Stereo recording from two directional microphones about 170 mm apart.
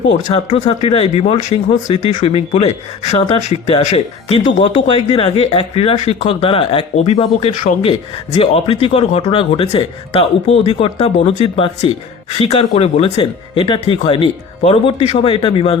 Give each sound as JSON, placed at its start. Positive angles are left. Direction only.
{"t": 0.3, "sound": "speech", "side_deg": 35}